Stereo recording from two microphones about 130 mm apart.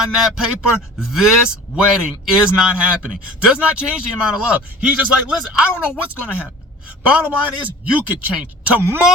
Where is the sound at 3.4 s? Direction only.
10° right (ahead or behind).